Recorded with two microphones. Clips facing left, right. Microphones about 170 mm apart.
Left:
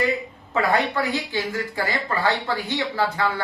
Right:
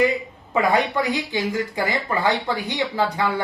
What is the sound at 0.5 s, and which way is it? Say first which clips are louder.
A man's voice: right 2 dB; 15° right (ahead or behind).